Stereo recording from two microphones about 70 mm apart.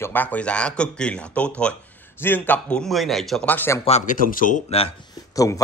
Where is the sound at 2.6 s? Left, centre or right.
Centre.